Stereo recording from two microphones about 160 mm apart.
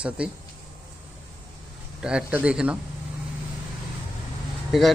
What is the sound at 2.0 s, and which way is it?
Speech, 5° right (ahead or behind).